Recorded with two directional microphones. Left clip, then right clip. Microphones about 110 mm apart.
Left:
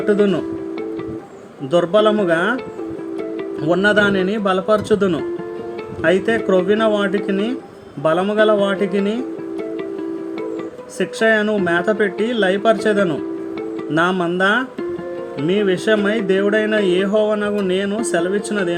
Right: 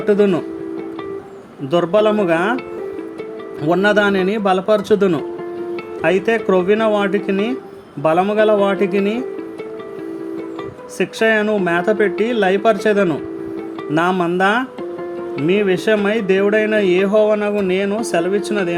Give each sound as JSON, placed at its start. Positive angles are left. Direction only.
{"t": 0.0, "sound": "speech", "side_deg": -35}
{"t": 1.7, "sound": "speech", "side_deg": -35}
{"t": 3.6, "sound": "speech", "side_deg": -35}
{"t": 10.9, "sound": "speech", "side_deg": -35}